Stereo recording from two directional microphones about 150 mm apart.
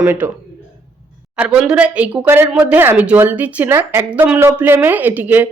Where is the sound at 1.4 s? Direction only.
5° right (ahead or behind).